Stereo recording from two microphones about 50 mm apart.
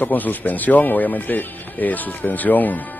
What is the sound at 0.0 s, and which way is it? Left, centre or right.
Speech, left.